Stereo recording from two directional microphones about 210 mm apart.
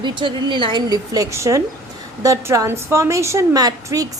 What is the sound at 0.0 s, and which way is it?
A woman's voice, 20° right (ahead or behind).